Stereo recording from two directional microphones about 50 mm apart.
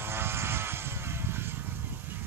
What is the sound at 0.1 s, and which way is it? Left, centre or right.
Vehicle, right.